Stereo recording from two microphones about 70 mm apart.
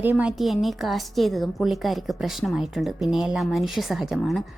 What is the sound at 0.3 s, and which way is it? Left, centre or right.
A woman's voice, centre.